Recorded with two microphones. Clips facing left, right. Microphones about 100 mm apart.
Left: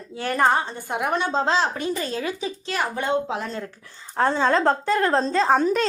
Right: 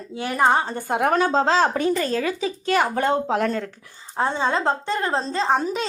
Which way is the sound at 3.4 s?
70° right (ahead or behind).